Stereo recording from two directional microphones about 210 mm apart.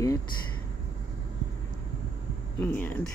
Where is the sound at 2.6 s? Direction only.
10° left (ahead or behind).